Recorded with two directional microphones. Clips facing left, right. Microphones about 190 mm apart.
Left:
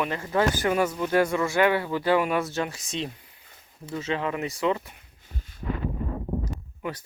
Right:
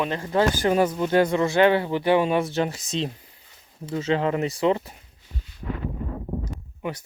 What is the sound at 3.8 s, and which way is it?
Speech, 35° right (ahead or behind).